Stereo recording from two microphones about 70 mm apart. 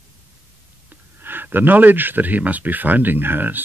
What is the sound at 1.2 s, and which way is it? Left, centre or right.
Speech, right.